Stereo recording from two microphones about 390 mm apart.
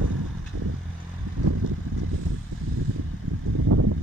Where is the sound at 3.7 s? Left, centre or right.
Right.